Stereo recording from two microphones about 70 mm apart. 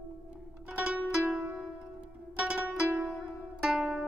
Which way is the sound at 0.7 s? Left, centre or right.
Centre.